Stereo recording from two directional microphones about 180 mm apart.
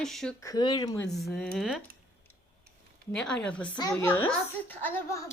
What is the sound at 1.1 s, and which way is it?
Speech, centre (ahead or behind).